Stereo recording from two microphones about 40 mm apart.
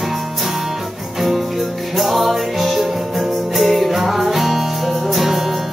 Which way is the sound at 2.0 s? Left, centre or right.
Centre.